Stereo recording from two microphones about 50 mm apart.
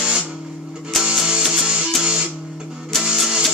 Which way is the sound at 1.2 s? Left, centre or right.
Centre.